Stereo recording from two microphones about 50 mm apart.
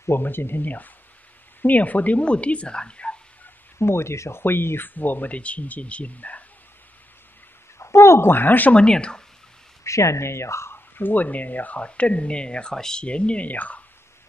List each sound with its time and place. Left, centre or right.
0.2 s speech: left
0.7 s speech: left; by 3.2 s centre
3.7 s speech: left
7.8 s speech: left
8.7 s speech: centre
9.8 s speech: left
11.0 s speech: left